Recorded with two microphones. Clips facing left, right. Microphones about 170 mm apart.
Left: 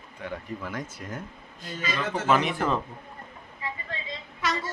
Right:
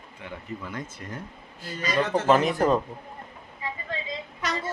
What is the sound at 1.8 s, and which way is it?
Speech, 40° right (ahead or behind).